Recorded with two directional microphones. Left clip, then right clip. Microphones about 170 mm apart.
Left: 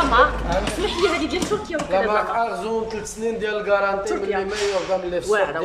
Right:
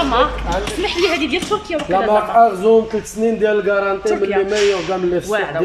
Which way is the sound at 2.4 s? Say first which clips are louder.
Right 12 dB; 35° right (ahead or behind).